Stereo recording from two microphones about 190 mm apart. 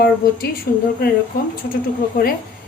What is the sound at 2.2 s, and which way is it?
Speech, 45° left (ahead or behind).